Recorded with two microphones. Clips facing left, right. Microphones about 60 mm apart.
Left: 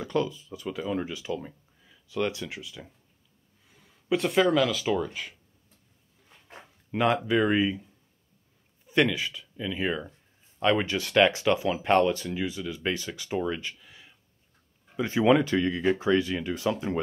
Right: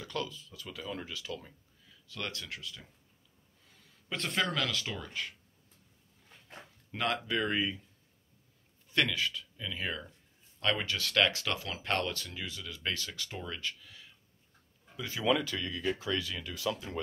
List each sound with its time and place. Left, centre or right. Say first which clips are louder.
0.0 s speech: left 10 dB; left
6.9 s speech: left 9 dB; centre
8.8 s speech: left 6 dB; centre
15.0 s speech: left 9 dB; left